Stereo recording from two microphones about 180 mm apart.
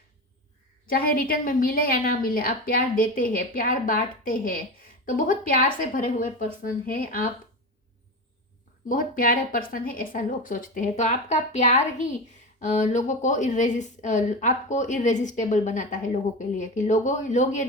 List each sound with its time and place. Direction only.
0.9 s speech: 55° left (ahead or behind)
8.9 s speech: 50° left (ahead or behind)